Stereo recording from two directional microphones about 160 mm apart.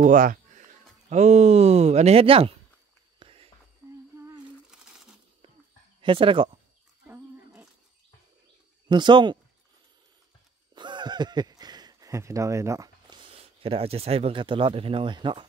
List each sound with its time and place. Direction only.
0.0 s speech: 55° right (ahead or behind); by 2.5 s 35° right (ahead or behind)
3.2 s walk: 35° right (ahead or behind)
4.6 s crumpling: 5° right (ahead or behind)
5.9 s speech: 35° right (ahead or behind)
8.8 s speech: 30° right (ahead or behind)
10.7 s speech: 30° right (ahead or behind)